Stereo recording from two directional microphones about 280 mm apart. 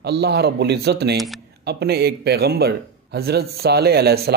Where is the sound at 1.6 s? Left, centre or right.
Right.